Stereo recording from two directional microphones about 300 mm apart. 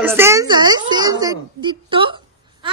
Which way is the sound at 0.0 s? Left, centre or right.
Centre.